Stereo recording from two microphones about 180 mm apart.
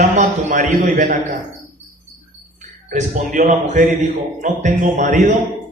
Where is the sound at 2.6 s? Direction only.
45° right (ahead or behind).